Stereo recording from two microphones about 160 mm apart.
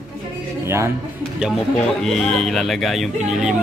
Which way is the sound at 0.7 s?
15° right (ahead or behind).